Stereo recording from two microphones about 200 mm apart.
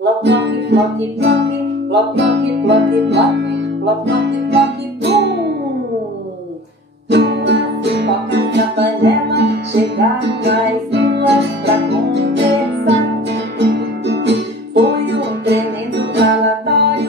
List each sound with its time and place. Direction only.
0.0 s music: 60° right (ahead or behind)
1.9 s music: 60° right (ahead or behind)
7.1 s music: 60° right (ahead or behind)